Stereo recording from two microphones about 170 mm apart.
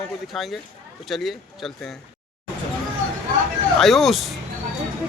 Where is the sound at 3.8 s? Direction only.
Centre (ahead or behind).